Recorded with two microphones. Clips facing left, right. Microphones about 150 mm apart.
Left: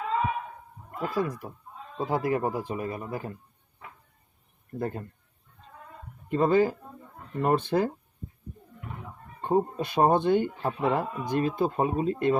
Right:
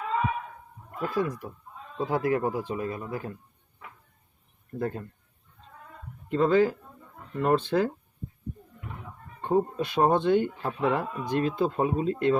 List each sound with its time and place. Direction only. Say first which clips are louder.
1.0 s speech: right 1 dB; 10° left (ahead or behind)
4.8 s speech: right 1 dB; 15° left (ahead or behind)
6.2 s speech: even; 15° left (ahead or behind)
9.4 s speech: even; 15° left (ahead or behind)